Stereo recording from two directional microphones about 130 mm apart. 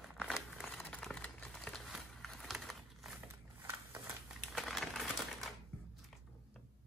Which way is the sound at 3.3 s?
15° right (ahead or behind).